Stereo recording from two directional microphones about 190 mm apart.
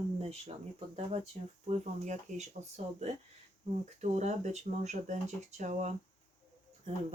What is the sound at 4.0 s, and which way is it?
Speech, 35° right (ahead or behind).